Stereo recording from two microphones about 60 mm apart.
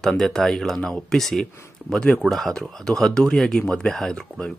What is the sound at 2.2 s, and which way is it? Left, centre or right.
Speech, centre.